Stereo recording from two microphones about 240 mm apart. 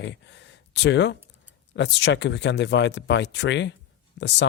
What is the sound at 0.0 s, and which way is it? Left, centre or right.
Speech, left.